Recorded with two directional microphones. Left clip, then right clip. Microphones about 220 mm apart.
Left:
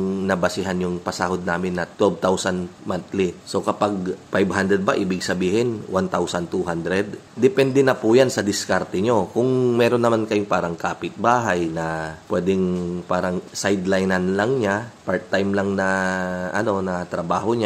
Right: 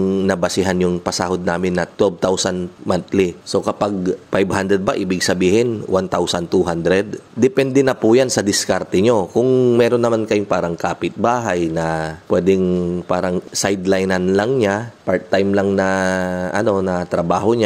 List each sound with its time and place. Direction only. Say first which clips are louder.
0.1 s a man's voice: right 4 dB; 30° right (ahead or behind)